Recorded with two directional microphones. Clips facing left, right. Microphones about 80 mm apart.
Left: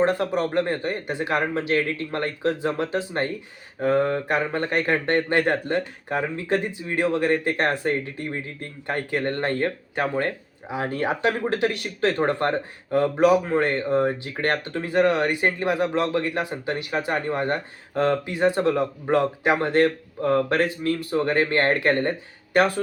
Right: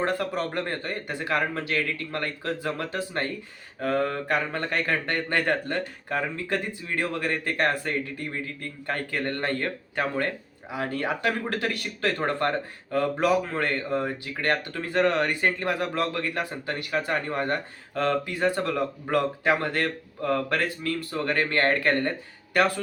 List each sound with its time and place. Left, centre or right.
0.0 s speech: left